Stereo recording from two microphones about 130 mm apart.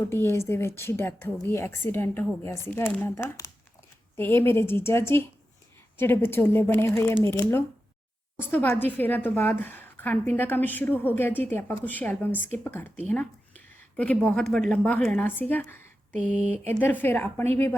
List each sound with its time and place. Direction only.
0.1 s a woman's voice: 20° left (ahead or behind)
16.2 s a sound: 10° right (ahead or behind)
16.5 s a woman's voice: 15° left (ahead or behind)